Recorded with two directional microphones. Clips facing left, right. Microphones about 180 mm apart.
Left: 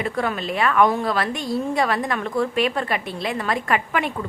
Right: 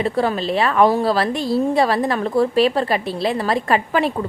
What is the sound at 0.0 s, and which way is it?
A woman's voice, 30° right (ahead or behind).